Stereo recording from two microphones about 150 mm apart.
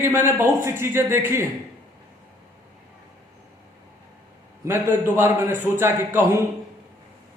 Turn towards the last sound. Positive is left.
turn(degrees=-15)  # may be behind; listen again after turning